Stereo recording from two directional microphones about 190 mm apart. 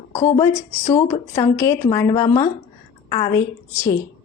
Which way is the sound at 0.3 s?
15° left (ahead or behind).